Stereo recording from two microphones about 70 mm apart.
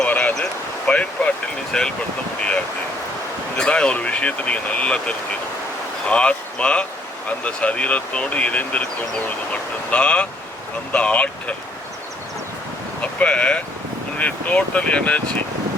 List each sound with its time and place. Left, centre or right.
0.0 s a sound: left
0.9 s speech: centre
1.7 s speech: centre
3.6 s speech: centre
13.0 s speech: centre